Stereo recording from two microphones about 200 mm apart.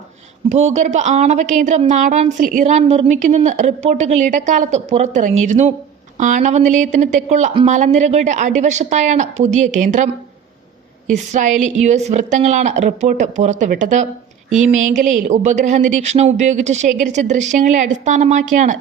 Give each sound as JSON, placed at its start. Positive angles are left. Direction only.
{"t": 0.4, "sound": "a woman's voice", "side_deg": -35}